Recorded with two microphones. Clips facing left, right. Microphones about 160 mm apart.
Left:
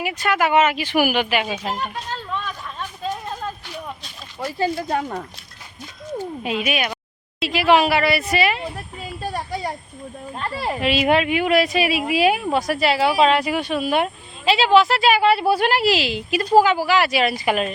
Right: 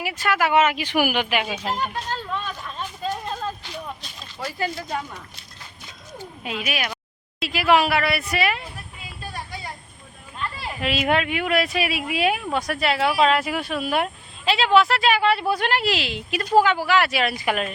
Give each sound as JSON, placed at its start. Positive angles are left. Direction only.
{"t": 0.2, "sound": "speech", "side_deg": 15}
{"t": 2.1, "sound": "a sound", "side_deg": 0}
{"t": 4.4, "sound": "speech", "side_deg": 25}
{"t": 4.9, "sound": "speech", "side_deg": 55}
{"t": 6.6, "sound": "speech", "side_deg": 20}
{"t": 7.3, "sound": "speech", "side_deg": 0}
{"t": 9.3, "sound": "a sound", "side_deg": 40}
{"t": 10.8, "sound": "speech", "side_deg": 0}